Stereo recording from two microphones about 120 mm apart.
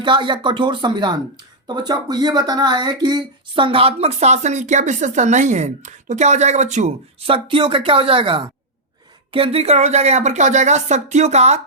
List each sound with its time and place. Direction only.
0.0 s speech: 40° right (ahead or behind); by 6.9 s 80° right
7.2 s a woman's voice: 50° right (ahead or behind); by 11.6 s 65° right (ahead or behind)